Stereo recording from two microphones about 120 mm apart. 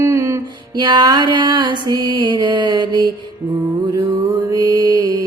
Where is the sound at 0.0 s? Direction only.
25° right (ahead or behind).